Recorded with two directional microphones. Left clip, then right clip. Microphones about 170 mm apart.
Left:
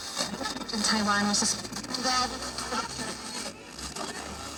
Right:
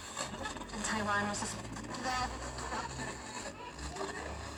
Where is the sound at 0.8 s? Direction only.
40° left (ahead or behind).